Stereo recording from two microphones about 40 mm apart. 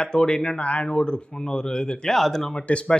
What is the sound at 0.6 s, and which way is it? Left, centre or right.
Speech, left.